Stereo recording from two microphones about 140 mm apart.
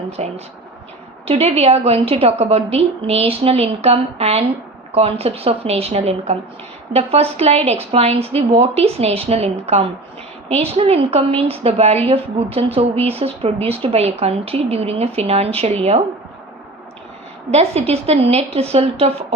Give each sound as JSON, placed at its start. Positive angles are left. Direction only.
{"t": 0.2, "sound": "a woman's voice", "side_deg": -50}
{"t": 17.5, "sound": "a woman's voice", "side_deg": -45}